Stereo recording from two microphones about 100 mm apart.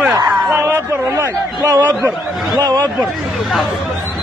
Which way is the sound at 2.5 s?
45° right (ahead or behind).